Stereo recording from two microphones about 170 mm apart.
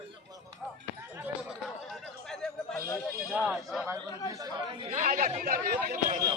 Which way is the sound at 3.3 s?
5° right (ahead or behind).